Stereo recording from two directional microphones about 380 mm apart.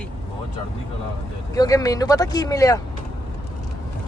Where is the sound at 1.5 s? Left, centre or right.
Centre.